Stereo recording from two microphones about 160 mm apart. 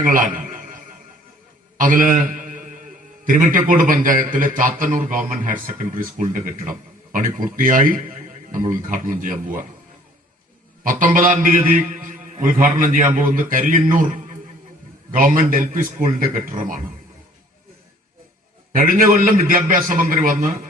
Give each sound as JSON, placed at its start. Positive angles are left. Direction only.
{"t": 0.0, "sound": "a sound", "side_deg": -55}
{"t": 1.8, "sound": "a man's voice", "side_deg": -55}
{"t": 10.8, "sound": "a man's voice", "side_deg": -60}
{"t": 15.1, "sound": "a man's voice", "side_deg": -60}
{"t": 18.7, "sound": "a man's voice", "side_deg": -60}